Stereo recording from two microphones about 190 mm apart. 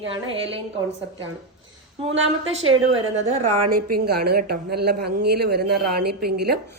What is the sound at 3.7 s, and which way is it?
A woman's voice, 55° right (ahead or behind).